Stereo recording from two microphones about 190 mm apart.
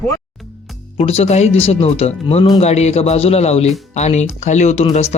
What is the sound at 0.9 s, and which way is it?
Speech, 35° left (ahead or behind).